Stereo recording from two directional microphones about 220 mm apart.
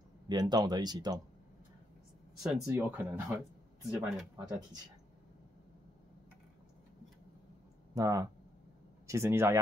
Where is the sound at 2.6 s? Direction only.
10° right (ahead or behind).